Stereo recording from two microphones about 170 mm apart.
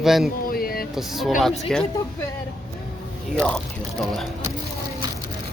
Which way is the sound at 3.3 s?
5° left (ahead or behind).